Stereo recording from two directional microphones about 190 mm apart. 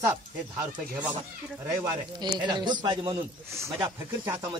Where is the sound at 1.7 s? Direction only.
20° right (ahead or behind).